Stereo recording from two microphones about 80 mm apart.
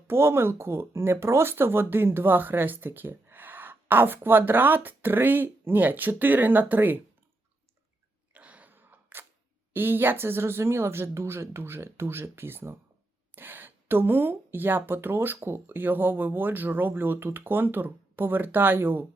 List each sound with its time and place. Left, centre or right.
0.1 s speech: right
8.3 s a sound: centre
9.7 s speech: right